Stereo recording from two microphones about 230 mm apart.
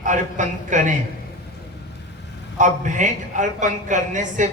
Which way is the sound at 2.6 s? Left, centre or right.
Right.